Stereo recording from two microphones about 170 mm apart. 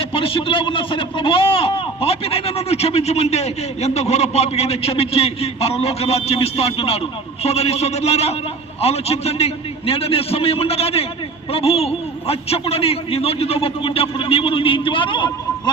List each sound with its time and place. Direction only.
0.0 s a man's voice: 30° left (ahead or behind)